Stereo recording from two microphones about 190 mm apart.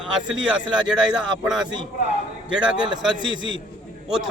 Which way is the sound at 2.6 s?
5° right (ahead or behind).